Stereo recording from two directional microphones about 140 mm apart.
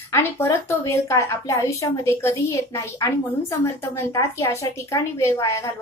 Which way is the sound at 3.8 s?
20° left (ahead or behind).